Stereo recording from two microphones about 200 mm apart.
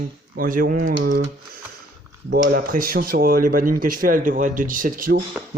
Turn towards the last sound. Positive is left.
turn(degrees=-45)  # may be behind; listen again after turning